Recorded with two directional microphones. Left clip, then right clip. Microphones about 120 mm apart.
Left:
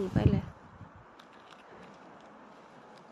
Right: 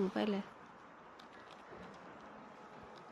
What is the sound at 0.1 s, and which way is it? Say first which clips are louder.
Speech: left 5 dB; 30° right (ahead or behind).